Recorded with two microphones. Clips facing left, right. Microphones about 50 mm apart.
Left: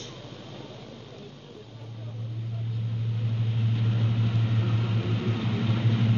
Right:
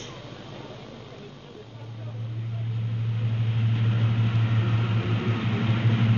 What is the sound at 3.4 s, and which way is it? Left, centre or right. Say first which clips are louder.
Vehicle: right 1 dB; right.